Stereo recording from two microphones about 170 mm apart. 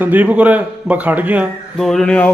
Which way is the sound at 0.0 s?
10° right (ahead or behind).